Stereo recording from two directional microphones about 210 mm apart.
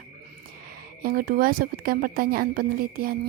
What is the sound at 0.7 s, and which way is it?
A woman's voice, 45° right (ahead or behind).